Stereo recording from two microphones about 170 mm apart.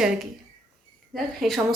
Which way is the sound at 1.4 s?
Centre (ahead or behind).